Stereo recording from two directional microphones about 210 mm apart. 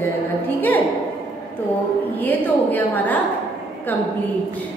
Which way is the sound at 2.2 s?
10° left (ahead or behind).